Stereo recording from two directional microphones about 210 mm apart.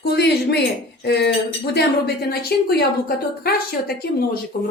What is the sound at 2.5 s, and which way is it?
Speech, 50° left (ahead or behind).